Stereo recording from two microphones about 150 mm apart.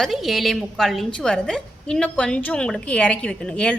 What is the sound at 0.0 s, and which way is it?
A woman's voice, centre (ahead or behind).